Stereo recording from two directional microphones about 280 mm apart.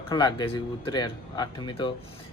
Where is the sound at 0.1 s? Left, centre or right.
Centre.